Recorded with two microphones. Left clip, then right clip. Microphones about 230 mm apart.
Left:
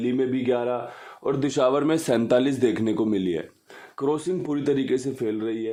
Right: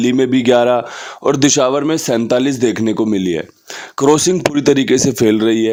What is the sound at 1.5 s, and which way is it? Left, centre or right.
Speech, right.